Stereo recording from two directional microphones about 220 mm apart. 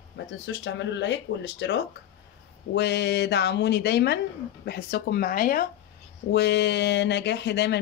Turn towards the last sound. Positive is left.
turn(degrees=50)  # may be behind; listen again after turning